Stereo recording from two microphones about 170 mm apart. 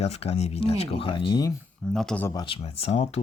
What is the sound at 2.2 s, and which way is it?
Speech, 25° left (ahead or behind).